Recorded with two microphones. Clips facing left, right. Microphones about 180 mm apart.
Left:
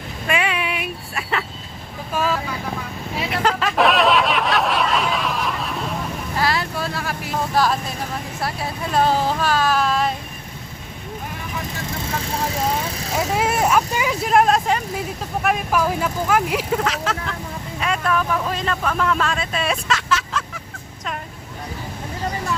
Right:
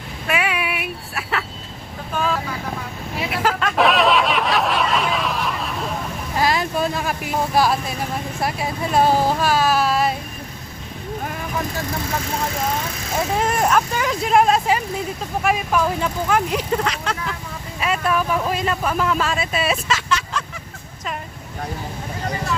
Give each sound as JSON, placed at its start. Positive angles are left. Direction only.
{"t": 0.3, "sound": "a sound", "side_deg": -5}
{"t": 2.1, "sound": "vehicle", "side_deg": 5}
{"t": 3.2, "sound": "a sound", "side_deg": -5}
{"t": 6.3, "sound": "vehicle", "side_deg": -15}
{"t": 8.4, "sound": "speech", "side_deg": -15}
{"t": 13.3, "sound": "speech", "side_deg": 5}